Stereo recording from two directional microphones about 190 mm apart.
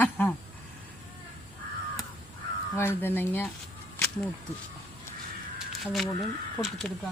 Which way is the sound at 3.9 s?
5° left (ahead or behind).